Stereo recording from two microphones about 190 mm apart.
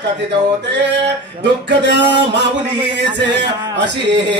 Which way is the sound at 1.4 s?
65° right (ahead or behind).